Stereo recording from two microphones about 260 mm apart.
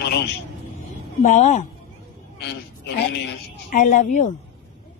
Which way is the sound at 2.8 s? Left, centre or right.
Left.